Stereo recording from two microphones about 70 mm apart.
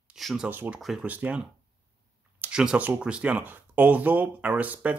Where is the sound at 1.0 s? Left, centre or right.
Right.